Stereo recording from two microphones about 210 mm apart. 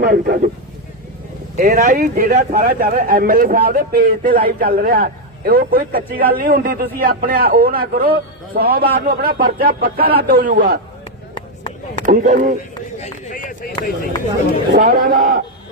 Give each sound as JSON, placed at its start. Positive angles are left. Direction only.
{"t": 0.0, "sound": "speech", "side_deg": -45}
{"t": 1.5, "sound": "a man's voice", "side_deg": -40}
{"t": 12.0, "sound": "a man's voice", "side_deg": -35}
{"t": 13.0, "sound": "speech", "side_deg": 30}
{"t": 14.7, "sound": "speech", "side_deg": -45}